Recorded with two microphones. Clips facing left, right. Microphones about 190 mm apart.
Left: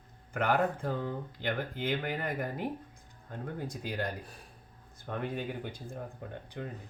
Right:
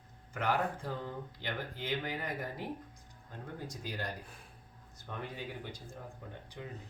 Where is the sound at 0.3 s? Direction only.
55° left (ahead or behind).